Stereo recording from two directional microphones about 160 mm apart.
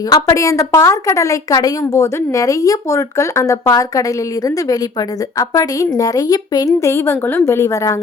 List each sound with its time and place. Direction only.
0.1 s a woman's voice: 20° left (ahead or behind)